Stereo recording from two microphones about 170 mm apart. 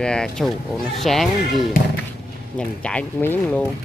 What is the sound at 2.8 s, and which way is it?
Speech, 5° left (ahead or behind).